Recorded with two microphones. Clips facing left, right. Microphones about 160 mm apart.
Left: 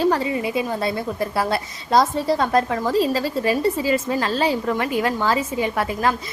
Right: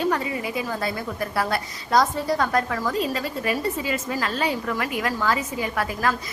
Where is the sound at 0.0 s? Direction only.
30° left (ahead or behind).